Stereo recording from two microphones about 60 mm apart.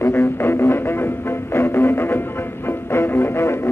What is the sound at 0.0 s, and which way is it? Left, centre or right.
Didgeridoo, left.